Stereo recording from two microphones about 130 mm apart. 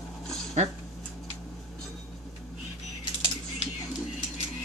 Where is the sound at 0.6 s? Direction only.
60° right (ahead or behind).